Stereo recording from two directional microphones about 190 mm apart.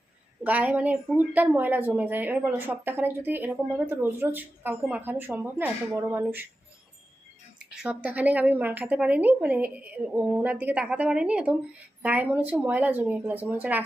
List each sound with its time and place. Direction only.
0.4 s a woman's voice: 10° right (ahead or behind)
7.8 s a woman's voice: 5° right (ahead or behind)